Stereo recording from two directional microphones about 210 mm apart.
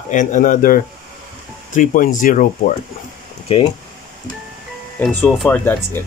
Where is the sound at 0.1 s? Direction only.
35° left (ahead or behind).